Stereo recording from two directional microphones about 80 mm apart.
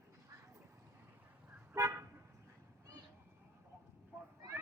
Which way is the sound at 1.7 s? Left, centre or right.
Right.